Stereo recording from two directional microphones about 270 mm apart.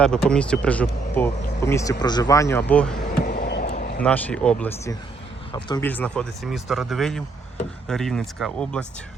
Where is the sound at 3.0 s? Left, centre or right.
Left.